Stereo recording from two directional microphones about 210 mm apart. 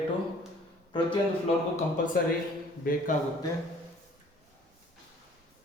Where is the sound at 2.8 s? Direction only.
40° left (ahead or behind).